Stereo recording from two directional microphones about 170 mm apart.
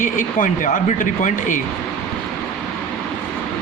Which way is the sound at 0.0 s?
50° left (ahead or behind).